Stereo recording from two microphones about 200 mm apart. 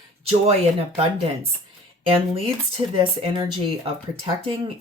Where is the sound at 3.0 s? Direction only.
25° right (ahead or behind).